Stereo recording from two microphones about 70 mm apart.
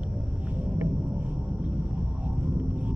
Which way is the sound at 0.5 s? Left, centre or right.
Right.